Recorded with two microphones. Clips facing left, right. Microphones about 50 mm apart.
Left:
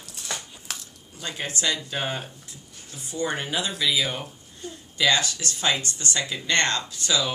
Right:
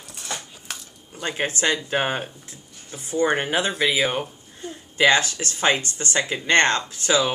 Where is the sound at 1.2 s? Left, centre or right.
Right.